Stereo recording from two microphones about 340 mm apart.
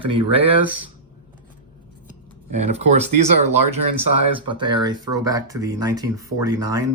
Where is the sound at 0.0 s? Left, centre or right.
Centre.